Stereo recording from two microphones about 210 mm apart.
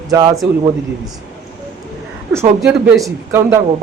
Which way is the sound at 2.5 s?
5° right (ahead or behind).